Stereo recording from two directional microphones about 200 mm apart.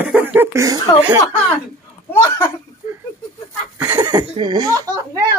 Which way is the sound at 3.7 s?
20° right (ahead or behind).